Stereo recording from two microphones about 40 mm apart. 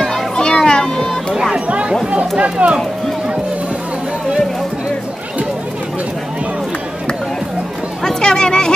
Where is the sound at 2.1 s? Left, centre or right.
Right.